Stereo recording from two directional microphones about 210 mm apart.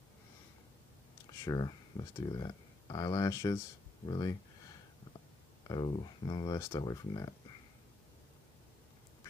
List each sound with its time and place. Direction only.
1.4 s speech: 20° left (ahead or behind)
5.7 s speech: 25° left (ahead or behind)